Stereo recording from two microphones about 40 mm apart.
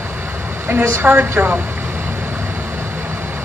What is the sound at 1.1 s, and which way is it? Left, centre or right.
Speech, right.